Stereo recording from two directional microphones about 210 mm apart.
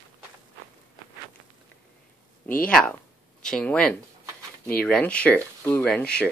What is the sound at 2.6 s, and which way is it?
Speech, 5° left (ahead or behind).